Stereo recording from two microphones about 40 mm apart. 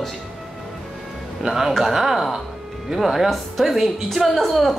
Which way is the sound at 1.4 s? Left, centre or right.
Centre.